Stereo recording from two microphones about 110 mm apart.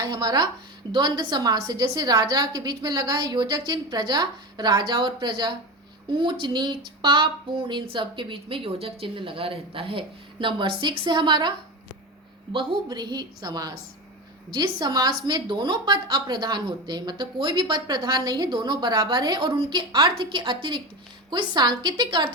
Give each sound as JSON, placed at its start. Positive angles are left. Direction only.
{"t": 0.0, "sound": "a woman's voice", "side_deg": -35}
{"t": 12.5, "sound": "a woman's voice", "side_deg": -40}